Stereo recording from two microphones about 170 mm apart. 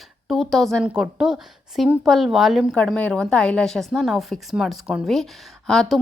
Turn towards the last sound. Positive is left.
turn(degrees=0)  # may be behind; listen again after turning